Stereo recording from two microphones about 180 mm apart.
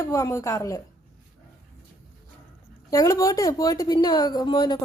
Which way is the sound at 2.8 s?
20° left (ahead or behind).